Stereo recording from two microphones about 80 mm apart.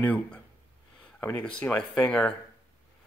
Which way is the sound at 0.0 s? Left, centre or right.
Centre.